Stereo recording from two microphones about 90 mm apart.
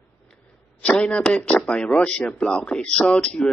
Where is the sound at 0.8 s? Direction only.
10° left (ahead or behind).